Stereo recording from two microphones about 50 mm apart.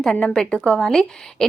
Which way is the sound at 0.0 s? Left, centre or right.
Centre.